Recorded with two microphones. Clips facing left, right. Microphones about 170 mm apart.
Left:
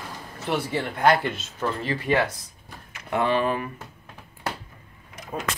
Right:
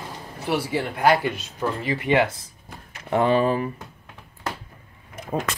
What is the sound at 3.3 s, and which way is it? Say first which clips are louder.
Speech: right 3 dB; 35° right (ahead or behind).